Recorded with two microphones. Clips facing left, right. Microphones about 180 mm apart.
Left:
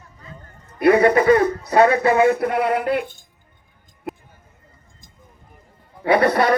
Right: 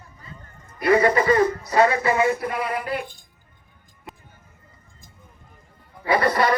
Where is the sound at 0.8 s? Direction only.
60° left (ahead or behind).